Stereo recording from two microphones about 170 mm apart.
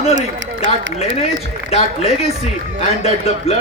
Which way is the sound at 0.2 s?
90° right.